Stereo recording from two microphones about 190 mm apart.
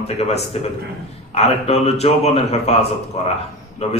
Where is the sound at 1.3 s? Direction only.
35° left (ahead or behind).